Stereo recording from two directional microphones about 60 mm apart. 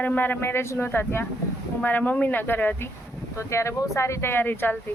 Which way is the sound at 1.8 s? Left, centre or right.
Left.